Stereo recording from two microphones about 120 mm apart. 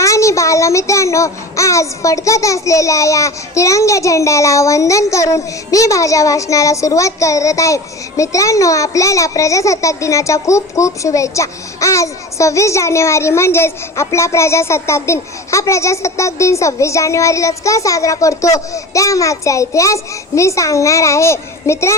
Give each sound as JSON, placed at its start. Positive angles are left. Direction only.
{"t": 0.0, "sound": "a child's voice", "side_deg": 25}